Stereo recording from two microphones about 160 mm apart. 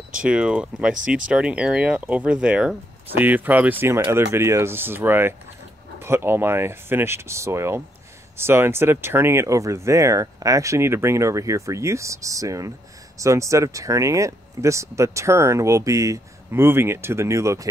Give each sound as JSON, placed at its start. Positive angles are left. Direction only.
{"t": 0.2, "sound": "speech", "side_deg": -5}